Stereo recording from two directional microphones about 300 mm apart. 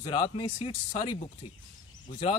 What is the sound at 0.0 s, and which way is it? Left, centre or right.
Speech, centre.